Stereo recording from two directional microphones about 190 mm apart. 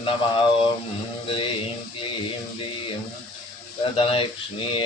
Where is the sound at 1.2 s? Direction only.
25° left (ahead or behind).